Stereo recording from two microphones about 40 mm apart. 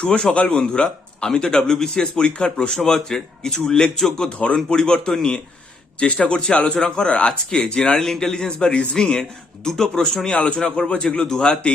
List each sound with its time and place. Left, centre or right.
0.0 s a man's voice: left
4.3 s a man's voice: left
8.5 s a man's voice: left